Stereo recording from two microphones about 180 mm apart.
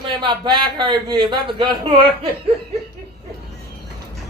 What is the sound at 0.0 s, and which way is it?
A man's voice, 25° right (ahead or behind).